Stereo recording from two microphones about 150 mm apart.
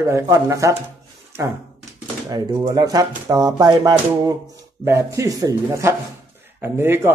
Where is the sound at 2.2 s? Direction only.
25° right (ahead or behind).